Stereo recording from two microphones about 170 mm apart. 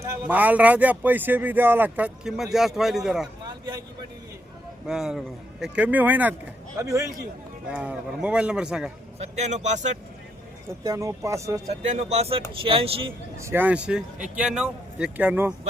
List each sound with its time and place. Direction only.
0.0 s speech: 15° right (ahead or behind)
4.9 s a man's voice: 5° right (ahead or behind); by 7.1 s 20° right (ahead or behind)
7.7 s speech: 5° right (ahead or behind)
9.1 s a man's voice: 40° right (ahead or behind)
10.8 s speech: 20° right (ahead or behind)
11.7 s speech: 40° right (ahead or behind)
13.3 s speech: 15° right (ahead or behind)